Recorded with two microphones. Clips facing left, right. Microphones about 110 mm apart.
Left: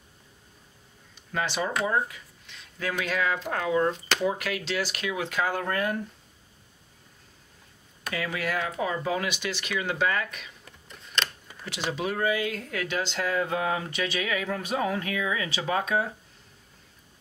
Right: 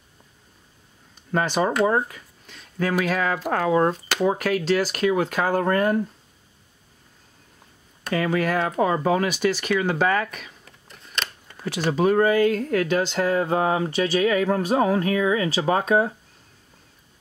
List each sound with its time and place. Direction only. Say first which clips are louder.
1.3 s speech: right 7 dB; 45° right (ahead or behind)
8.1 s speech: right 8 dB; 45° right (ahead or behind)
10.6 s a sound: even; centre (ahead or behind)
11.6 s speech: right 9 dB; 45° right (ahead or behind)